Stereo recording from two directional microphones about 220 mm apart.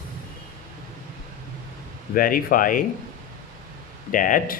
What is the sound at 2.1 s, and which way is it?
Speech, 40° left (ahead or behind).